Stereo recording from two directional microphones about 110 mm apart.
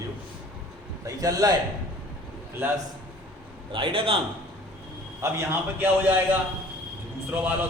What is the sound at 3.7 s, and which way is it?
Speech, 55° right (ahead or behind).